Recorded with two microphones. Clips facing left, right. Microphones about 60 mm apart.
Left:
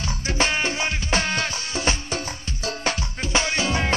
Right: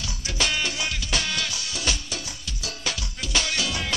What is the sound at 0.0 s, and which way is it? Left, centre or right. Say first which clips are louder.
Music: left 5 dB; left.